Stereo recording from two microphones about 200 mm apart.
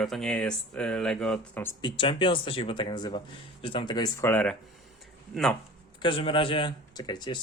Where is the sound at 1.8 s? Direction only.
25° left (ahead or behind); by 4.5 s 10° left (ahead or behind).